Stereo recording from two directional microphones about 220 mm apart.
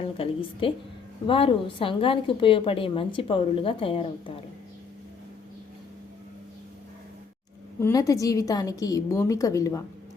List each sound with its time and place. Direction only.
0.0 s a woman's voice: 25° left (ahead or behind)
7.8 s a woman's voice: 15° left (ahead or behind)